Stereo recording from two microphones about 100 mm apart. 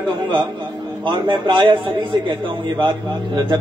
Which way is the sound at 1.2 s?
45° right (ahead or behind).